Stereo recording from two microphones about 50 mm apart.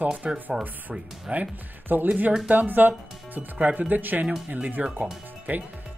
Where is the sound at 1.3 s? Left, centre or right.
Right.